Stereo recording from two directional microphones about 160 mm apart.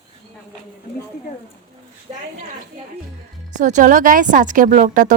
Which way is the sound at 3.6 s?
50° right (ahead or behind).